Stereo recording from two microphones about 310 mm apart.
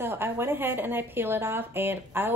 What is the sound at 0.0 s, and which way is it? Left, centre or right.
A woman's voice, centre.